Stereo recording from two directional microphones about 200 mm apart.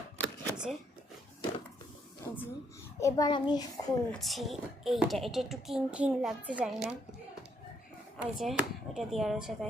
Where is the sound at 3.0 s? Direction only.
15° left (ahead or behind).